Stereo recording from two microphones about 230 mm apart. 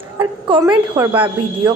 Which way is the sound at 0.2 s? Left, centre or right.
Right.